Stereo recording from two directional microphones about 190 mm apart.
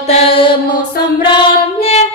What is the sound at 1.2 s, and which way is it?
Child singing, 30° left (ahead or behind).